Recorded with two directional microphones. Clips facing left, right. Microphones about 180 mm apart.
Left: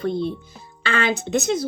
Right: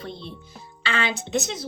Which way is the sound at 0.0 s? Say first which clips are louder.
Left 13 dB; 50° left (ahead or behind).